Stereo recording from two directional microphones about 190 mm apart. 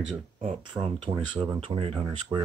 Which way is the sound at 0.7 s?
25° right (ahead or behind).